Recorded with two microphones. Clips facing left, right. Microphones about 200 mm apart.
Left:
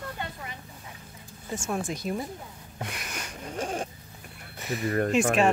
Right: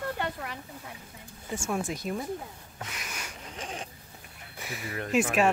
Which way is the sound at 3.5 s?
50° left (ahead or behind).